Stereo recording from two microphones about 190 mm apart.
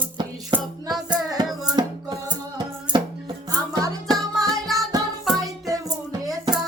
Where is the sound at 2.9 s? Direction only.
5° right (ahead or behind).